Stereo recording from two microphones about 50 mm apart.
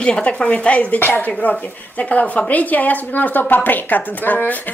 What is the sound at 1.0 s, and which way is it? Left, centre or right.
A woman's voice, left.